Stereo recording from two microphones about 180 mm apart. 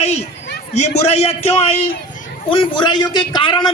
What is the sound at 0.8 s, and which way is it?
A man's voice, 35° left (ahead or behind).